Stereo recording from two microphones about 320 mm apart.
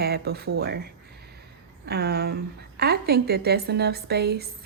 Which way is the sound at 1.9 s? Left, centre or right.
Right.